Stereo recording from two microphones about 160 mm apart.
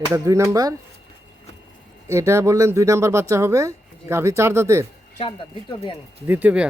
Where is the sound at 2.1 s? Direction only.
15° right (ahead or behind).